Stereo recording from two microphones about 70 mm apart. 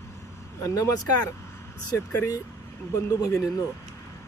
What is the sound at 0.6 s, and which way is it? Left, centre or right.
Speech, left.